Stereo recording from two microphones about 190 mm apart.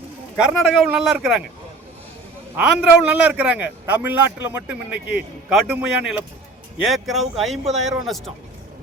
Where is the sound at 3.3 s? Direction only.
10° right (ahead or behind).